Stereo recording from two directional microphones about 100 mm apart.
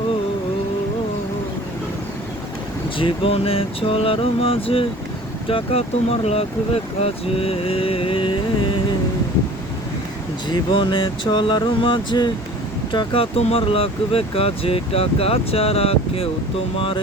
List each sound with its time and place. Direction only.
3.0 s speech: 70° left (ahead or behind); by 6.4 s 90° left
7.0 s speech: 75° left (ahead or behind)
10.5 s a sound: 55° left (ahead or behind)
12.9 s speech: 50° left (ahead or behind)
13.3 s speech: 75° left (ahead or behind)
16.7 s a sound: 65° left (ahead or behind)